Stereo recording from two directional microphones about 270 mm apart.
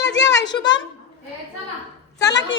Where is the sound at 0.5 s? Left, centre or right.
Centre.